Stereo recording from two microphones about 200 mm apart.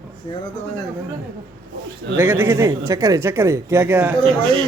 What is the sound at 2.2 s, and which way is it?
A man's voice, 10° right (ahead or behind).